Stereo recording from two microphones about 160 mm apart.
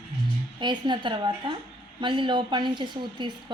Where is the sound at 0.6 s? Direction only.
30° right (ahead or behind).